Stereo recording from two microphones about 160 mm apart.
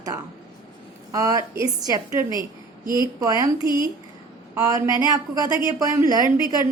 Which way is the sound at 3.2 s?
20° right (ahead or behind).